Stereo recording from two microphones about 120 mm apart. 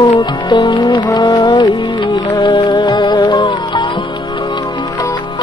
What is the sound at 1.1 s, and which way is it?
Music, 30° left (ahead or behind).